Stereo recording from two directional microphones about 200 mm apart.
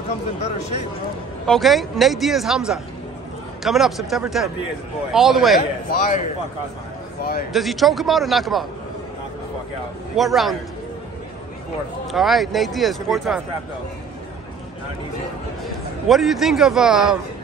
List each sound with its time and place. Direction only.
1.4 s a man's voice: centre (ahead or behind)
5.6 s a man's voice: 40° left (ahead or behind)
7.5 s a man's voice: centre (ahead or behind)
10.1 s a man's voice: centre (ahead or behind)
12.1 s a man's voice: centre (ahead or behind)
16.1 s a man's voice: centre (ahead or behind)